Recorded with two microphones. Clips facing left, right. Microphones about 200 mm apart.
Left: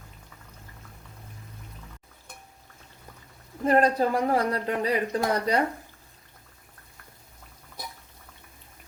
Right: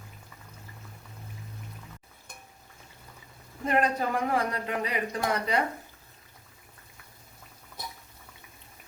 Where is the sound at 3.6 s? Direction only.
35° left (ahead or behind).